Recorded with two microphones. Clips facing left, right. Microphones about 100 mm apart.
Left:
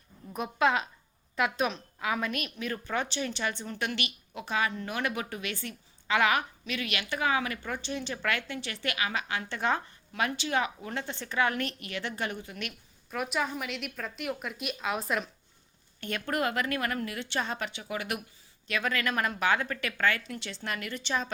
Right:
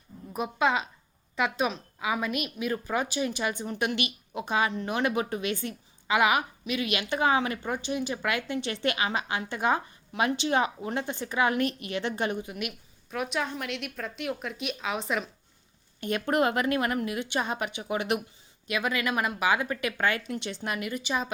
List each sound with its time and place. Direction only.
0.3 s a woman's voice: centre (ahead or behind)
13.1 s a woman's voice: centre (ahead or behind)
16.0 s a woman's voice: 15° right (ahead or behind)